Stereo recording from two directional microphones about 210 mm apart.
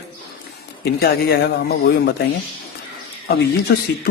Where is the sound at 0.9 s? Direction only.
50° left (ahead or behind).